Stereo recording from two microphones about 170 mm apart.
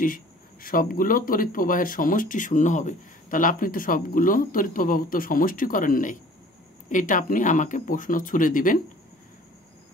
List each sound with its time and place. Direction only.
0.0 s speech: 55° left (ahead or behind)